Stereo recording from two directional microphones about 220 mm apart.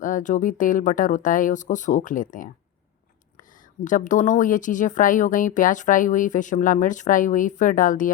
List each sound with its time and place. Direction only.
0.0 s speech: 35° left (ahead or behind)
3.8 s speech: 35° left (ahead or behind)